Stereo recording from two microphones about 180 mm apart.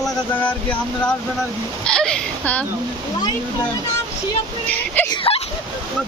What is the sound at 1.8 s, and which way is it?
Speech, 5° left (ahead or behind).